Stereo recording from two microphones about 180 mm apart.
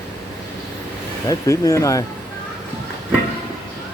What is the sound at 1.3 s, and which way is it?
Speech, 20° left (ahead or behind).